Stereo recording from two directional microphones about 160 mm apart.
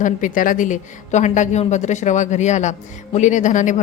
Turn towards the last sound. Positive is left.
turn(degrees=50)  # may be behind; listen again after turning